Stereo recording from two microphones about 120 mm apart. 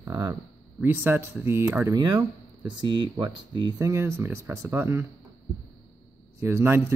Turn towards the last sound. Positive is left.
turn(degrees=-20)  # may be behind; listen again after turning